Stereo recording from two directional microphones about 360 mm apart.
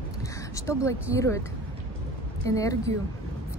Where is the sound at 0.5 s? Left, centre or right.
Centre.